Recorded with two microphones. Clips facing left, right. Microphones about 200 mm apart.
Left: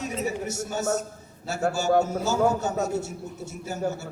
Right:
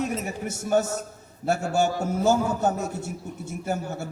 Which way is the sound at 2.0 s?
55° right (ahead or behind).